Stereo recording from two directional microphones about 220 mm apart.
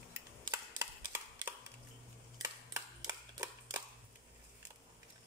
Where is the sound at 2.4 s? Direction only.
15° right (ahead or behind).